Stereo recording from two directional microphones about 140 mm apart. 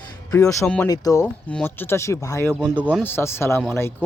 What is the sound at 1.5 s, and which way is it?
Speech, 10° left (ahead or behind).